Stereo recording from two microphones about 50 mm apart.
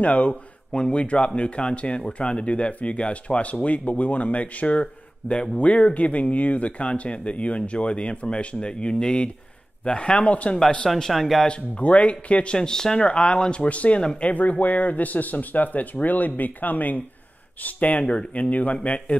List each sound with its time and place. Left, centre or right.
0.0 s speech: left
5.3 s speech: centre
11.0 s speech: centre
11.4 s speech: left
12.5 s speech: centre